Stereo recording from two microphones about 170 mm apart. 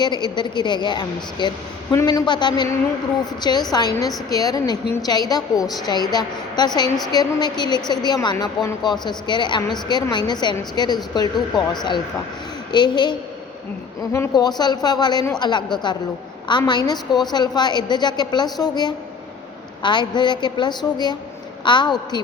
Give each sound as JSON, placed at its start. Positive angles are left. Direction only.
{"t": 0.0, "sound": "a woman's voice", "side_deg": 25}